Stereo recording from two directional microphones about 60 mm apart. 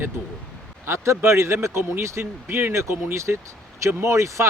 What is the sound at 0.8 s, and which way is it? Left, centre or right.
Speech, right.